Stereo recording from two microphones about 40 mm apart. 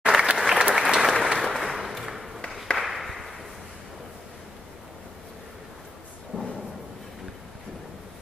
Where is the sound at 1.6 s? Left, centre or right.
Centre.